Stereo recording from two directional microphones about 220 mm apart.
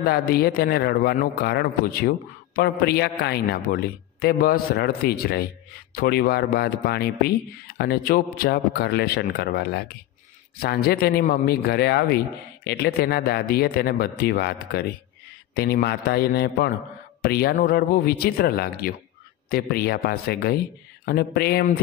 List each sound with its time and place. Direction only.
0.0 s a man's voice: 45° left (ahead or behind)